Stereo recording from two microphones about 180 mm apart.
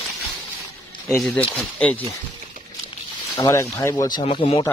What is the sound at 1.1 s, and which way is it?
Speech, 5° left (ahead or behind).